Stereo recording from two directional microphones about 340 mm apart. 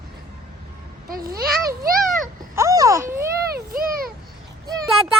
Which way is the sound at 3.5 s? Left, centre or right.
Right.